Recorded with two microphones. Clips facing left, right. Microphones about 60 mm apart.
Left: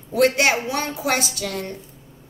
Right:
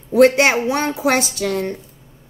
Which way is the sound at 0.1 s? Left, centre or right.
Right.